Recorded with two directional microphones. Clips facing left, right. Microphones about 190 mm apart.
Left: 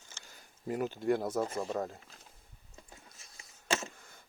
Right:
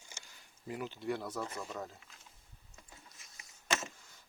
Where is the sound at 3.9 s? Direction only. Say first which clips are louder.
Left 5 dB; 55° left (ahead or behind).